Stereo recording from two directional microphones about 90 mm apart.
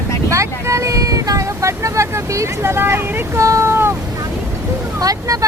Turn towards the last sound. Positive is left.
turn(degrees=-40)  # may be behind; listen again after turning